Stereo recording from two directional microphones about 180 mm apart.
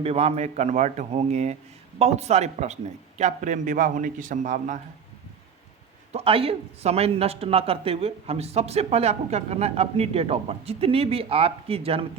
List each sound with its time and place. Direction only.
0.0 s a man's voice: 35° right (ahead or behind)
6.1 s speech: 30° right (ahead or behind)